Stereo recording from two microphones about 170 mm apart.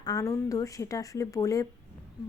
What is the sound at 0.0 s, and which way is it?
A woman's voice, 20° left (ahead or behind).